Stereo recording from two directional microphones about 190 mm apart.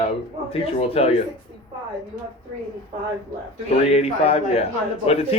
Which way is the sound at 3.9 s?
35° left (ahead or behind).